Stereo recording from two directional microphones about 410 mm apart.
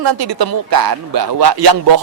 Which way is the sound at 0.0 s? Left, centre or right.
Right.